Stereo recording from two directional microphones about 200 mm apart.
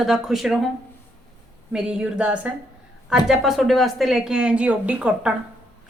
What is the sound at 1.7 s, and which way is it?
A woman's voice, 5° right (ahead or behind).